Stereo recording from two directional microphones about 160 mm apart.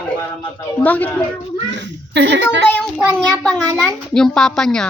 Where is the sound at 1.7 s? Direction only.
90° right.